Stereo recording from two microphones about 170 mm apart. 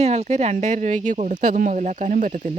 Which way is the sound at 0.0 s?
40° right (ahead or behind).